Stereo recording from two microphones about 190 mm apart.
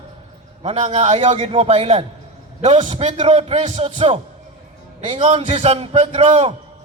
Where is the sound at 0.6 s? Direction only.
35° right (ahead or behind).